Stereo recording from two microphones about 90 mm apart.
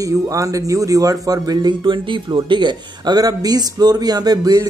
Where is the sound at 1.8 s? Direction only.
65° right (ahead or behind).